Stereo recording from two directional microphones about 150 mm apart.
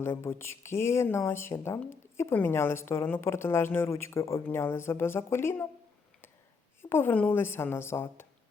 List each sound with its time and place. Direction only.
0.0 s speech: 15° left (ahead or behind)
6.9 s speech: 10° left (ahead or behind)